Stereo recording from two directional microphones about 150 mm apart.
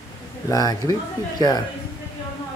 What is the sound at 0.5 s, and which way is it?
Speech, 25° left (ahead or behind).